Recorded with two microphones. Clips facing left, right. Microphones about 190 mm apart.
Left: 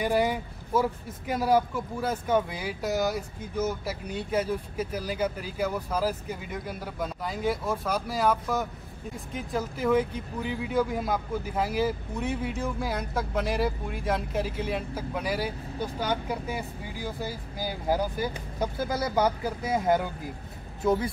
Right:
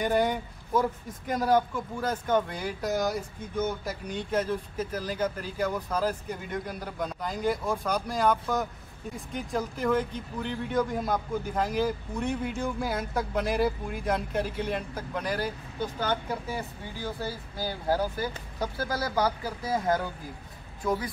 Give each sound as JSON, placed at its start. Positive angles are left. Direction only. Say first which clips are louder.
{"t": 0.0, "sound": "speech", "louder": "even", "side_deg": 5}